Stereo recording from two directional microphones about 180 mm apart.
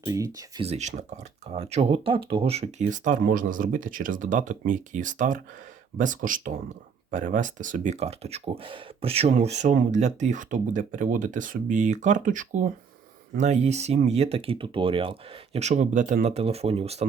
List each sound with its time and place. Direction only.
0.0 s speech: 20° right (ahead or behind)
0.6 s speech: 40° right (ahead or behind)